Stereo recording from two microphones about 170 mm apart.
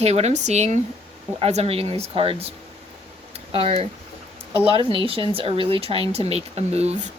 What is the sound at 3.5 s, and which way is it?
Speech, 30° right (ahead or behind).